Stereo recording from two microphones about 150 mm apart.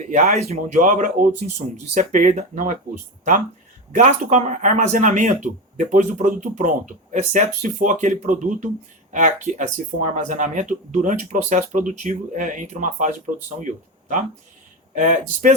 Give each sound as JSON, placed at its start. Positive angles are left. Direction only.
{"t": 0.1, "sound": "speech", "side_deg": -45}
{"t": 3.9, "sound": "speech", "side_deg": -50}
{"t": 14.9, "sound": "speech", "side_deg": -55}